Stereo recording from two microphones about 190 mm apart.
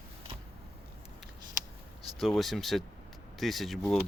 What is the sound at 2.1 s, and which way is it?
Speech, centre (ahead or behind).